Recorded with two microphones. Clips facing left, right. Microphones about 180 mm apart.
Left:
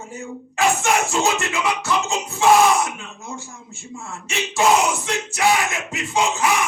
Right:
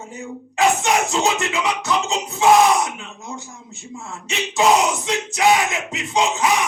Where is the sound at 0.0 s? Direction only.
20° right (ahead or behind).